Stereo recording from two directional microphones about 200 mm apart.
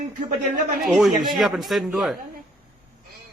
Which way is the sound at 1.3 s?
Centre (ahead or behind).